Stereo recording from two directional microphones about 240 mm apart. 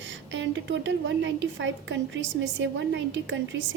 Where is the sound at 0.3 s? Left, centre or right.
Right.